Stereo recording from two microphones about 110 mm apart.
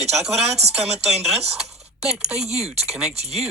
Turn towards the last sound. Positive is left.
turn(degrees=-70)  # may be behind; listen again after turning